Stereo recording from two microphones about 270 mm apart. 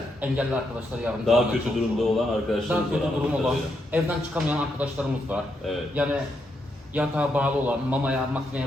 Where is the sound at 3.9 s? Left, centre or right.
Centre.